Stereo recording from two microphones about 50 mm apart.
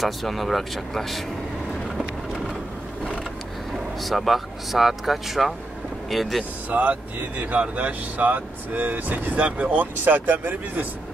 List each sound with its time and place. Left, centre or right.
0.0 s speech: centre
3.7 s speech: centre
6.7 s speech: right
10.0 s speech: right